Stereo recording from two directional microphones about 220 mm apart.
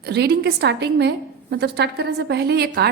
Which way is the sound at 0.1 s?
50° right (ahead or behind).